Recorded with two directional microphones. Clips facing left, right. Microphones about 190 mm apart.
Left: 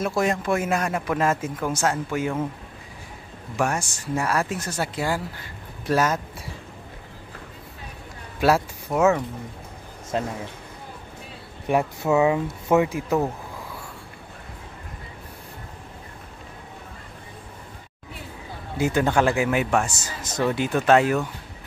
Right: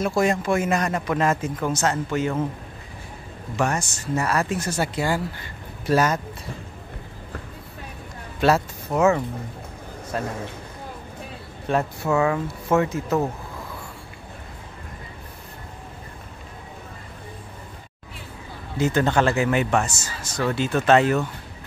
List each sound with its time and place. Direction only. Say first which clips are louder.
0.0 s a man's voice: right 2 dB; centre (ahead or behind)
3.5 s a man's voice: right 1 dB; 10° left (ahead or behind)
8.4 s speech: even; 5° left (ahead or behind)
10.1 s a man's voice: left 2 dB; 25° left (ahead or behind)
11.6 s speech: left 1 dB; 15° left (ahead or behind)
18.8 s speech: right 1 dB; 10° left (ahead or behind)